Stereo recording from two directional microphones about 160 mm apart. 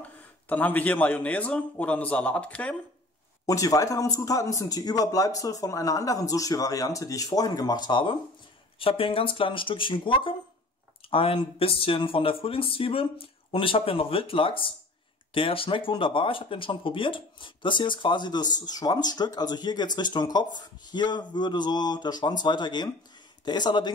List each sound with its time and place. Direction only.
0.0 s speech: 10° left (ahead or behind)
3.4 s speech: 20° left (ahead or behind)